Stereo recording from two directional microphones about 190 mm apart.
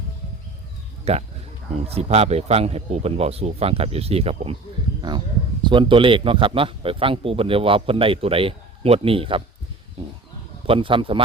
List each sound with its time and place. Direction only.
1.1 s speech: 35° right (ahead or behind)
10.7 s speech: 25° right (ahead or behind)